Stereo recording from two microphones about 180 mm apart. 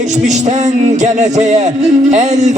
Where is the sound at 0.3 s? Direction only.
40° right (ahead or behind).